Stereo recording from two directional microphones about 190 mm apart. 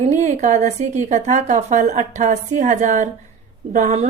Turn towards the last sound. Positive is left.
turn(degrees=-35)  # may be behind; listen again after turning